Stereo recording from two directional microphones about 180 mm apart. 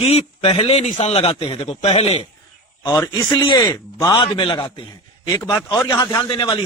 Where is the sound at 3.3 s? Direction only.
20° left (ahead or behind).